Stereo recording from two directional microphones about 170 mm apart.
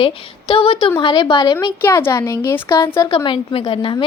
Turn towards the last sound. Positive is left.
turn(degrees=30)  # may be behind; listen again after turning